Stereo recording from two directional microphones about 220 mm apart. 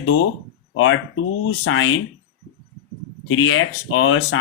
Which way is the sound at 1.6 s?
65° left (ahead or behind).